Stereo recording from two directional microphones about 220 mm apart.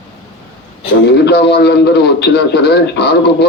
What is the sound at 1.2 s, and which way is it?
A man's voice, 50° left (ahead or behind).